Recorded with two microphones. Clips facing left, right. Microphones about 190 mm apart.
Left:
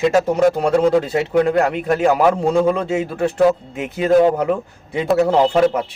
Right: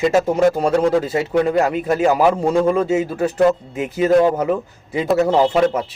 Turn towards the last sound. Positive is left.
turn(degrees=0)  # may be behind; listen again after turning